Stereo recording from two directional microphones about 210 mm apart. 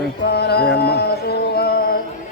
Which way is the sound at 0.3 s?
50° left (ahead or behind).